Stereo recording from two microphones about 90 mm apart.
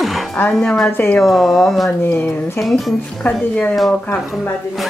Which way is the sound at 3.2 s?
15° left (ahead or behind).